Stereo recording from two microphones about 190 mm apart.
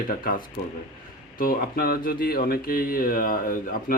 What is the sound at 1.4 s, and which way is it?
Speech, 50° left (ahead or behind).